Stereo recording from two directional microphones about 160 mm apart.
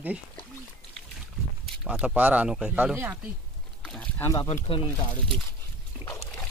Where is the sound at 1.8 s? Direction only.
5° right (ahead or behind).